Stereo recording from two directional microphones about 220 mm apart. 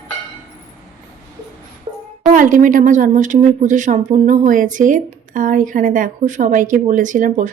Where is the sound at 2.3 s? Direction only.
35° right (ahead or behind).